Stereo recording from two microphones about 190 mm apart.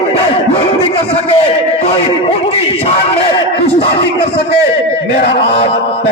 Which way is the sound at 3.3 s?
30° left (ahead or behind).